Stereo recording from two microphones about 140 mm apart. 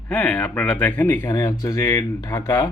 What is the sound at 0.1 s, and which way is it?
Speech, 10° left (ahead or behind).